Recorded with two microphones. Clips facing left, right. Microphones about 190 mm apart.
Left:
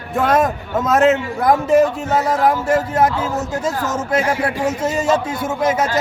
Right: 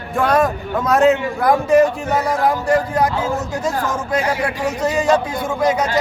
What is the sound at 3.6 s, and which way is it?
Speech, 25° left (ahead or behind).